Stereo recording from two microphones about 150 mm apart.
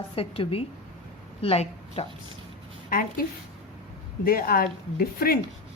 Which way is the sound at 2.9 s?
70° left (ahead or behind).